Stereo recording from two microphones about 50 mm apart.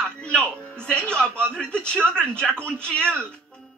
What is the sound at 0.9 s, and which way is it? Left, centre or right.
Speech, centre.